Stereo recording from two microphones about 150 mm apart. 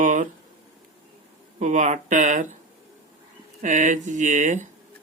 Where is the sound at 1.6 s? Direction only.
55° right (ahead or behind).